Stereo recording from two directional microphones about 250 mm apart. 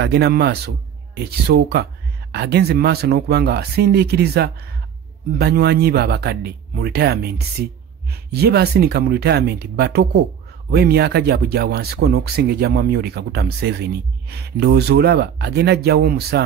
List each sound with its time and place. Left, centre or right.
0.0 s speech: right